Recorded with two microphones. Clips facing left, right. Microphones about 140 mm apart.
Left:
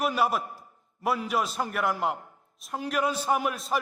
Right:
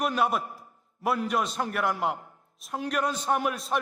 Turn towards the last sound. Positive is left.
turn(degrees=0)  # may be behind; listen again after turning